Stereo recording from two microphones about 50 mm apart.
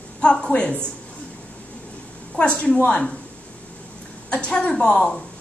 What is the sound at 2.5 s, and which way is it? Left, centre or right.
Speech, left.